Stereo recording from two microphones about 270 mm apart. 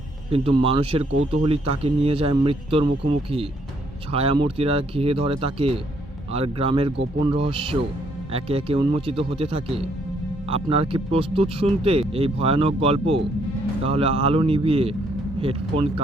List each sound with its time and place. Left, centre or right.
0.3 s speech: right